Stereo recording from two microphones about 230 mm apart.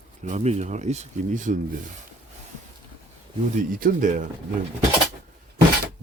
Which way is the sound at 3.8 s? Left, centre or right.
Right.